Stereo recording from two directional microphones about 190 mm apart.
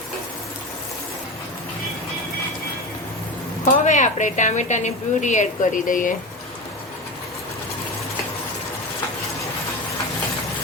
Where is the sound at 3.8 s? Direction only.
40° left (ahead or behind).